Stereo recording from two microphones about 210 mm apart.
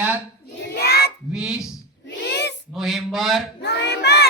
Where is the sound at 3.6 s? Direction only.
55° left (ahead or behind).